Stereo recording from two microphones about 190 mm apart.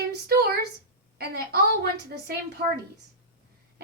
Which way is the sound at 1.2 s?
55° right (ahead or behind).